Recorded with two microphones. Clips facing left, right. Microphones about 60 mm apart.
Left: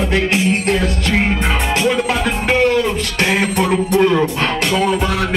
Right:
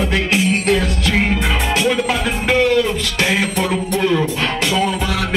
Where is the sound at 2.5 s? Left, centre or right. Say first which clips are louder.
Even; left.